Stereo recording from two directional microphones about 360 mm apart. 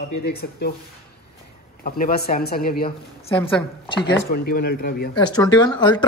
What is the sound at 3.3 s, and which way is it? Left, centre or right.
Speech, centre.